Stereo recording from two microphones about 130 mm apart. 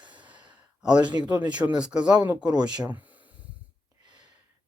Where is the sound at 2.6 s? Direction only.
30° right (ahead or behind).